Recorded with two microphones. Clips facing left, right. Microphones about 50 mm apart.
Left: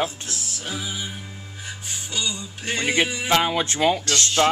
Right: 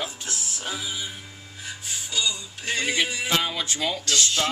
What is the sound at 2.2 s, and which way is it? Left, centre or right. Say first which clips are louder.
Music: even; centre.